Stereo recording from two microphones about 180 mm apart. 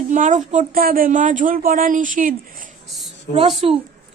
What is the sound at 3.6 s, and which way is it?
Speech, 35° right (ahead or behind).